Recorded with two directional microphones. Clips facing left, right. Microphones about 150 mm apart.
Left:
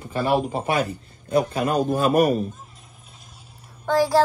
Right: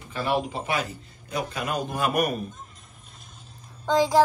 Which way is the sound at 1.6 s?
35° left (ahead or behind).